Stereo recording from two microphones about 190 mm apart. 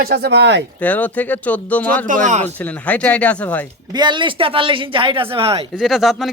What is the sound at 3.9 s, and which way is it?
Speech, 25° right (ahead or behind).